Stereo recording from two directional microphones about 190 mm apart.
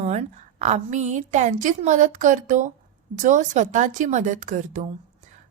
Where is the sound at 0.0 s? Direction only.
35° right (ahead or behind).